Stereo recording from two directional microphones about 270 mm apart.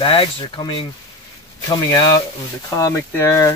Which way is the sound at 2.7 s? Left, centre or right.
Centre.